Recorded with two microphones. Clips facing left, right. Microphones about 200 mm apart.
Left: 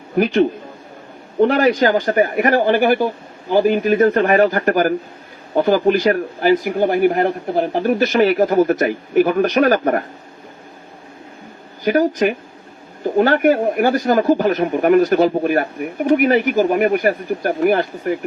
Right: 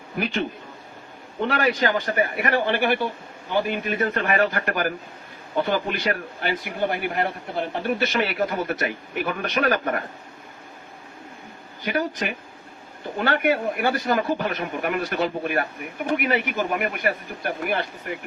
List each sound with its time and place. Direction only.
0.2 s a man's voice: 40° left (ahead or behind)
11.9 s a man's voice: 40° left (ahead or behind)